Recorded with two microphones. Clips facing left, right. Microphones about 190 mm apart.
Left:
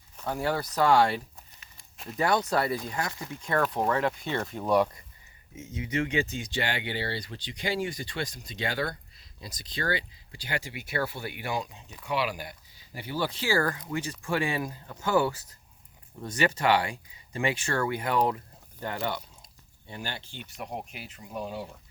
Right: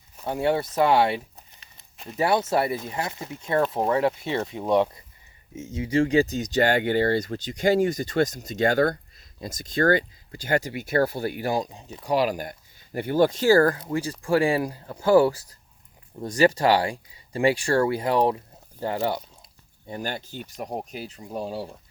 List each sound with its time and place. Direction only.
0.3 s speech: 25° right (ahead or behind)
4.5 s speech: 5° right (ahead or behind)
5.5 s speech: 30° right (ahead or behind)
19.9 s speech: 40° right (ahead or behind)